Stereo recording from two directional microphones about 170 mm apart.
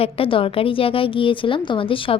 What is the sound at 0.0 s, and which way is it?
A woman's voice, 30° left (ahead or behind).